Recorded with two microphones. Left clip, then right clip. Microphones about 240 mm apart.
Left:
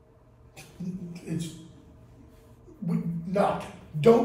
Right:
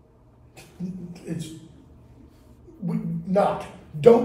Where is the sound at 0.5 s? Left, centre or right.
Centre.